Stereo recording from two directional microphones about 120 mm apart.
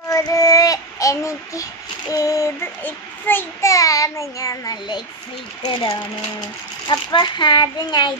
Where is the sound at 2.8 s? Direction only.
15° left (ahead or behind); by 8.2 s 35° left (ahead or behind).